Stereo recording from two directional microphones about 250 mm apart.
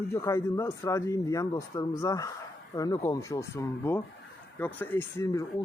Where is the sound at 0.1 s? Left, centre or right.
Centre.